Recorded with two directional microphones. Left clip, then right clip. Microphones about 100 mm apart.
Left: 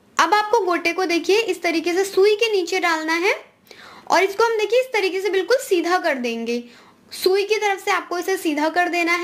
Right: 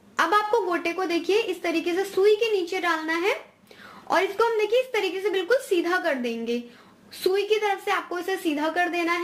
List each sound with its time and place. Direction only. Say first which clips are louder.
0.1 s a woman's voice: left 5 dB; 35° left (ahead or behind)